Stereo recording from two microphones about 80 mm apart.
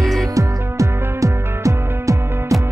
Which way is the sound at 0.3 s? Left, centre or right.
Right.